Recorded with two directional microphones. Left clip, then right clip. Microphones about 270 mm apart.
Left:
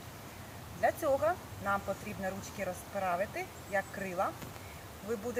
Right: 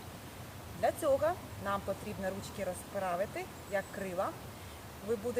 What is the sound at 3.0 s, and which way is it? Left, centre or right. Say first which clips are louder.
Speech: left 2 dB; centre.